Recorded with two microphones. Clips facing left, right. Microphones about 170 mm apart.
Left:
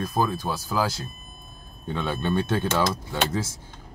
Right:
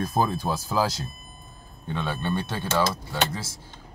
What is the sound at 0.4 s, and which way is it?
Speech, 20° right (ahead or behind).